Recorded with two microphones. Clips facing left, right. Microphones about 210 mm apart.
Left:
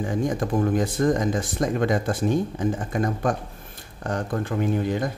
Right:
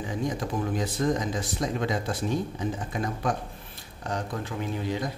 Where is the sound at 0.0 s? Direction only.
50° left (ahead or behind).